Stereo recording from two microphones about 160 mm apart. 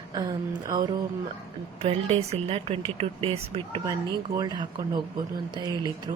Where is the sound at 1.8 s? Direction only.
40° right (ahead or behind).